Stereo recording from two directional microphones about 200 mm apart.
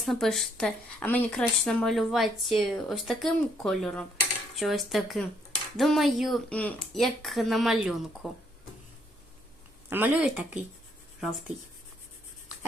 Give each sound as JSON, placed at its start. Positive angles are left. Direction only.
{"t": 0.0, "sound": "a woman's voice", "side_deg": 0}
{"t": 9.9, "sound": "a woman's voice", "side_deg": -10}